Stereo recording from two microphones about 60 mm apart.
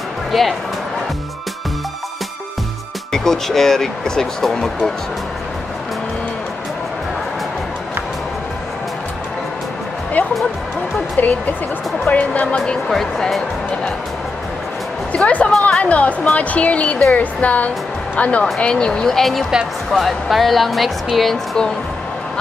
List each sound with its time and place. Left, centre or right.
0.3 s speech: centre
3.1 s speech: centre
11.2 s a woman's voice: left
12.8 s a woman's voice: centre
15.1 s a woman's voice: left; by 21.6 s centre